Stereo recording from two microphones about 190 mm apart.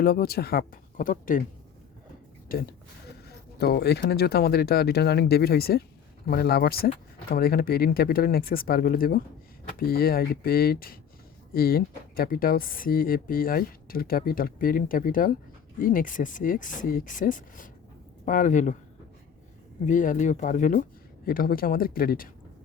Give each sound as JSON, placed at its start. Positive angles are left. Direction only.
{"t": 0.0, "sound": "speech", "side_deg": 55}
{"t": 3.6, "sound": "speech", "side_deg": 55}
{"t": 19.8, "sound": "speech", "side_deg": 40}